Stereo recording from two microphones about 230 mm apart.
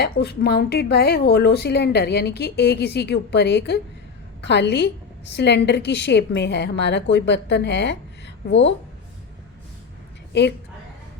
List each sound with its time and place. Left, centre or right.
0.0 s speech: left